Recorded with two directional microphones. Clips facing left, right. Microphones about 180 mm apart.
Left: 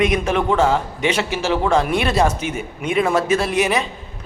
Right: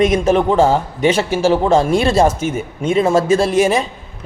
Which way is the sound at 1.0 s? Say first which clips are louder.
Right 5 dB; 45° right (ahead or behind).